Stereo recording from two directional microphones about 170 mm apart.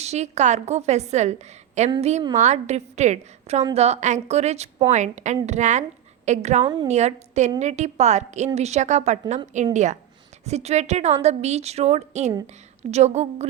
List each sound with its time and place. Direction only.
0.0 s a woman's voice: 40° right (ahead or behind)